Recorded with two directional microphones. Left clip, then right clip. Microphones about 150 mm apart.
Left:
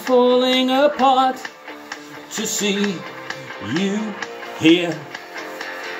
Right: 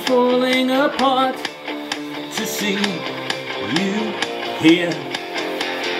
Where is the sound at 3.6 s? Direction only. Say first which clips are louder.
Right 1 dB; 30° right (ahead or behind).